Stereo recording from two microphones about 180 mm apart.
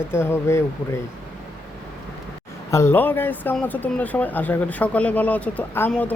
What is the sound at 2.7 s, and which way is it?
Speech, 15° left (ahead or behind).